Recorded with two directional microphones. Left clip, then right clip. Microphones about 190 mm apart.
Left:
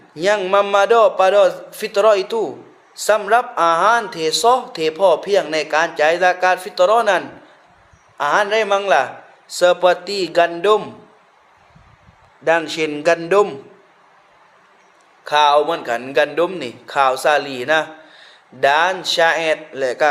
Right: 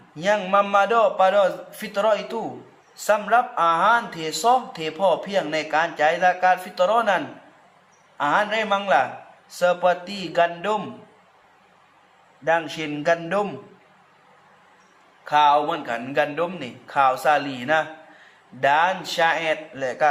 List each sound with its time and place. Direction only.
0.2 s a man's voice: 30° left (ahead or behind)
8.2 s a man's voice: 30° left (ahead or behind)
12.5 s a man's voice: 40° left (ahead or behind)
15.2 s a man's voice: 30° left (ahead or behind)